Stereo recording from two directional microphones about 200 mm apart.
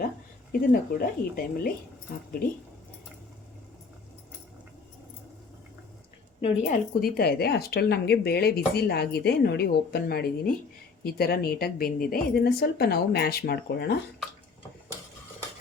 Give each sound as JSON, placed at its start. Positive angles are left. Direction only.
{"t": 0.6, "sound": "speech", "side_deg": 45}
{"t": 6.7, "sound": "speech", "side_deg": 50}